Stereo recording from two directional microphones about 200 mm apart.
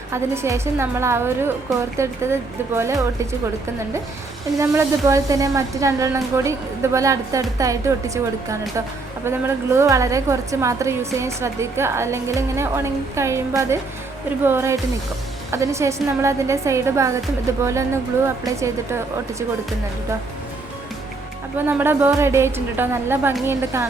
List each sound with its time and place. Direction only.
0.1 s a woman's voice: 15° right (ahead or behind)
4.6 s a woman's voice: 15° right (ahead or behind)
21.7 s a woman's voice: 10° right (ahead or behind)